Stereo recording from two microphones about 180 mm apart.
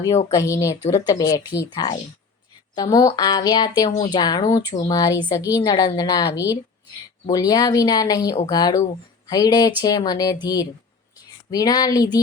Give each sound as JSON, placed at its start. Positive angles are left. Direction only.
{"t": 0.3, "sound": "speech", "side_deg": 15}